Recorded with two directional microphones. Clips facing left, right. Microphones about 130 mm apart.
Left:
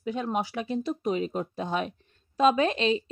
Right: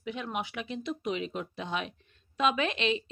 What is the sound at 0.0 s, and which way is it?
Speech, 35° left (ahead or behind).